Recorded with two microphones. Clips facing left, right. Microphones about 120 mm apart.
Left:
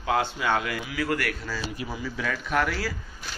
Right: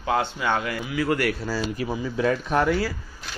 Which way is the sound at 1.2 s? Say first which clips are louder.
Right 6 dB; 35° right (ahead or behind).